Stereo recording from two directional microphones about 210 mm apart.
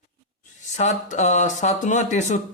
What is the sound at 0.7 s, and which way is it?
Speech, 35° left (ahead or behind).